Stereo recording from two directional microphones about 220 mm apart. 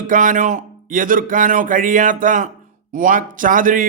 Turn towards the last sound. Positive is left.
turn(degrees=-40)  # may be behind; listen again after turning